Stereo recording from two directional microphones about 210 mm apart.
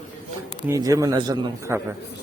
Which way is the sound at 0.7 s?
15° right (ahead or behind).